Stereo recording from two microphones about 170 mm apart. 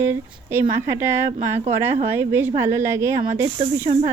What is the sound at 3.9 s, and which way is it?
Speech, 40° right (ahead or behind).